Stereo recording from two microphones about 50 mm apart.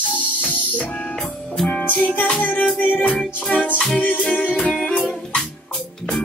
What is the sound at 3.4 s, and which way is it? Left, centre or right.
Music, left.